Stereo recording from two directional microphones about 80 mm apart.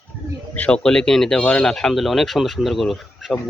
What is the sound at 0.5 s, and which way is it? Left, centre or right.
Speech, centre.